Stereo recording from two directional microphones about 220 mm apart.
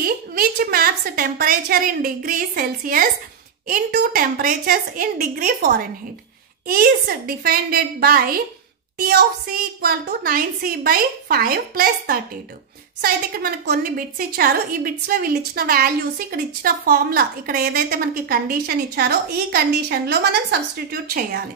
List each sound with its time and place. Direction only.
0.0 s a woman's voice: 40° right (ahead or behind)